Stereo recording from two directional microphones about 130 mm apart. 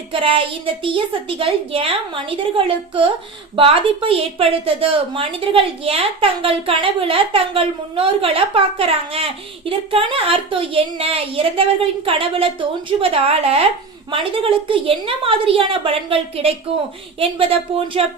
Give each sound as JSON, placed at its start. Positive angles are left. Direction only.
{"t": 0.1, "sound": "a woman's voice", "side_deg": -45}